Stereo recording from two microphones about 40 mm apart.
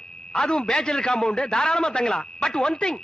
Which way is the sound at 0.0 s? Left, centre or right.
Left.